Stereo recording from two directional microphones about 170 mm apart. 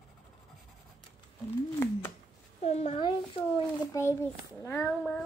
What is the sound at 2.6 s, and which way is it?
A child's voice, 40° left (ahead or behind).